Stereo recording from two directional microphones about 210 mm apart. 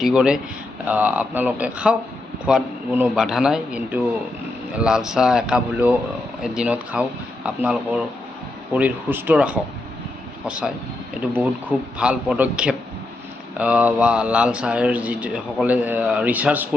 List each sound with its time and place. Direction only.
0.0 s a man's voice: 5° right (ahead or behind)
11.9 s a man's voice: 5° right (ahead or behind)